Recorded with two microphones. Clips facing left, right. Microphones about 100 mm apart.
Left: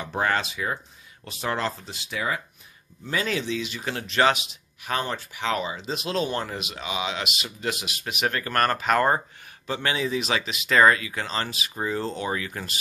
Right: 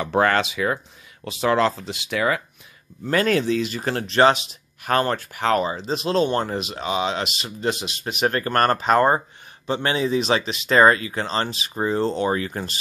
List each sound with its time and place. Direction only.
0.0 s speech: 85° right
3.1 s speech: 55° right (ahead or behind); by 4.4 s 35° right (ahead or behind)
4.8 s speech: 55° right (ahead or behind); by 12.7 s 35° right (ahead or behind)